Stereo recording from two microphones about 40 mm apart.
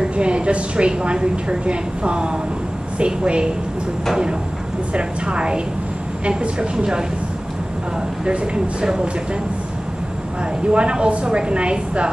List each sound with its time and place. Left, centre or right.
0.2 s a woman's voice: right
4.9 s a woman's voice: right
10.7 s a woman's voice: right